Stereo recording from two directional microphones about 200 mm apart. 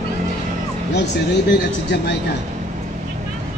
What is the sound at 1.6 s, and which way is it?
Speech, 55° left (ahead or behind).